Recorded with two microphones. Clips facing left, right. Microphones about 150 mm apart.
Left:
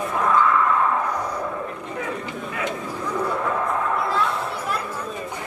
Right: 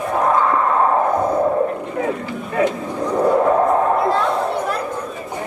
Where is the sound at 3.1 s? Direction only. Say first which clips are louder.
Right 10 dB; 40° right (ahead or behind).